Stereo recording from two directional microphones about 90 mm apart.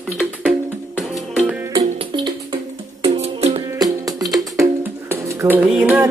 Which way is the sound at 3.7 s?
45° right (ahead or behind).